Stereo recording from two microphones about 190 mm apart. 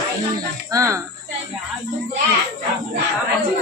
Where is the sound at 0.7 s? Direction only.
15° right (ahead or behind).